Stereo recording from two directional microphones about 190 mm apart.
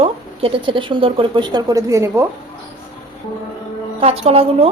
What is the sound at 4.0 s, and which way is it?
Speech, 30° right (ahead or behind).